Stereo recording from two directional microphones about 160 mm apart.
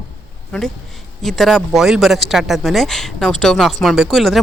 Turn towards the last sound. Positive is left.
turn(degrees=0)  # may be behind; listen again after turning